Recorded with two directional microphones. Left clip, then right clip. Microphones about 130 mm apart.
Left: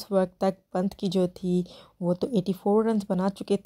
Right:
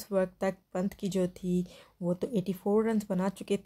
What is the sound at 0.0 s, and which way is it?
Speech, 45° left (ahead or behind).